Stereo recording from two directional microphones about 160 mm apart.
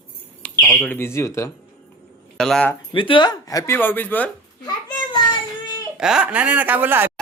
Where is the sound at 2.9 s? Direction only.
30° left (ahead or behind).